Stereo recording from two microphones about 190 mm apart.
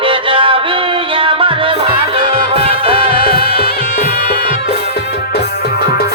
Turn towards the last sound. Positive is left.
turn(degrees=55)  # may be behind; listen again after turning